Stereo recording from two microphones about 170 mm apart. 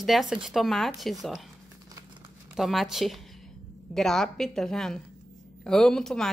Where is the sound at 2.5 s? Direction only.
Centre (ahead or behind).